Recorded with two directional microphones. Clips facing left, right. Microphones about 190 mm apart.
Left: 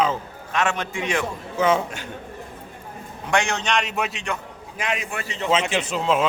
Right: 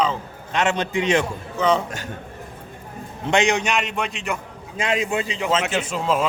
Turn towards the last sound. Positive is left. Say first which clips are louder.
# even
turn(degrees=-5)  # may be behind; listen again after turning